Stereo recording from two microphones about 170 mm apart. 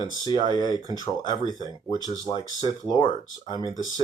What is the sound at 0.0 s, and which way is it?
Speech, 25° left (ahead or behind).